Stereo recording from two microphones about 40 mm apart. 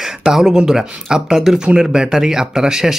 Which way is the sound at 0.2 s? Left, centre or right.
Centre.